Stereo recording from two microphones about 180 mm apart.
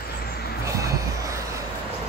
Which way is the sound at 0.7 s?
15° right (ahead or behind).